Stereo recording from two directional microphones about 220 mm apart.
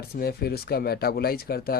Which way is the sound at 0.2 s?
45° left (ahead or behind).